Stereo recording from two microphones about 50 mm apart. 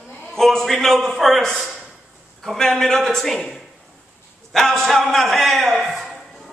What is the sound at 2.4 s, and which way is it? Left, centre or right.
A man's voice, centre.